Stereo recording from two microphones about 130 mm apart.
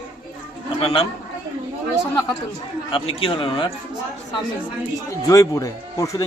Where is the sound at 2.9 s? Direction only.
45° left (ahead or behind).